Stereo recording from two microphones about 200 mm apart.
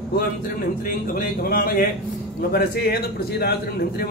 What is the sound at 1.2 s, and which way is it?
A man's voice, 45° left (ahead or behind).